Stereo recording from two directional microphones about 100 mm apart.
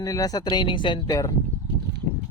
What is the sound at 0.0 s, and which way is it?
Speech, 35° left (ahead or behind).